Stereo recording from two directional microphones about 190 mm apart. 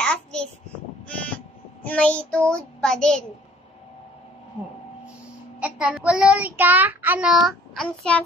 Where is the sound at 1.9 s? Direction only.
5° left (ahead or behind).